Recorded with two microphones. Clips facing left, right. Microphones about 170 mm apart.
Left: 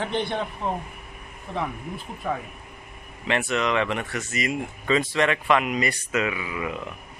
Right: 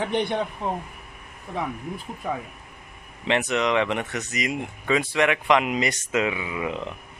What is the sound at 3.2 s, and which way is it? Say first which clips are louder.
Speech: right 2 dB; 20° right (ahead or behind).